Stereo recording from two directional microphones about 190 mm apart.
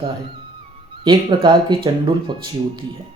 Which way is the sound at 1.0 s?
25° right (ahead or behind).